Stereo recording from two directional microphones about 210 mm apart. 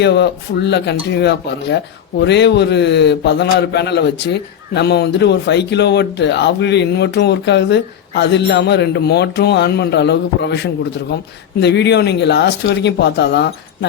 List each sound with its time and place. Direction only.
0.0 s a man's voice: 55° left (ahead or behind)